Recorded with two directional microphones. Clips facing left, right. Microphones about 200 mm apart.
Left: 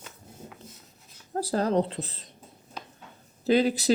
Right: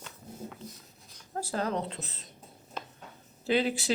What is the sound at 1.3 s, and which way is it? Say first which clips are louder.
Speech: left 7 dB; 35° left (ahead or behind).